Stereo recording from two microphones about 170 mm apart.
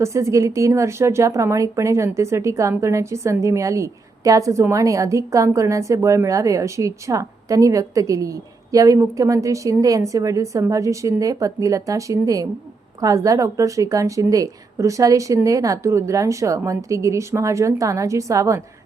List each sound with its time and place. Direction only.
0.0 s a woman's voice: 15° right (ahead or behind)